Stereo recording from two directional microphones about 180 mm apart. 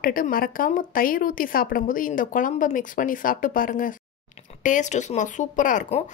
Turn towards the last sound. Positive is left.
turn(degrees=45)  # may be behind; listen again after turning